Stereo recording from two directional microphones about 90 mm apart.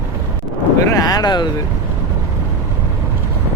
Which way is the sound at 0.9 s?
45° left (ahead or behind).